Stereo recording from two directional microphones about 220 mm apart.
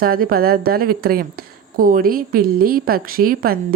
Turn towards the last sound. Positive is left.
turn(degrees=-40)  # may be behind; listen again after turning